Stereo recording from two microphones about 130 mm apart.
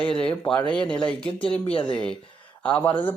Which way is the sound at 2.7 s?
10° left (ahead or behind).